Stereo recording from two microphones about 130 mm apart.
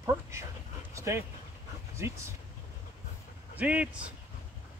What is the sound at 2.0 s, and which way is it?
Speech, 20° right (ahead or behind).